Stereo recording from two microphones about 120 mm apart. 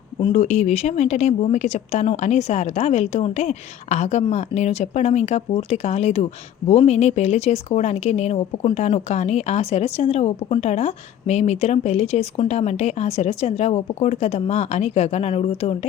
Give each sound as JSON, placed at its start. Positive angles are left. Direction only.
{"t": 0.3, "sound": "speech", "side_deg": 70}